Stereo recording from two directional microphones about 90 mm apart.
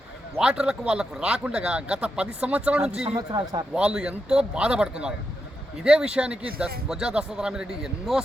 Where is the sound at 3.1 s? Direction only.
45° right (ahead or behind).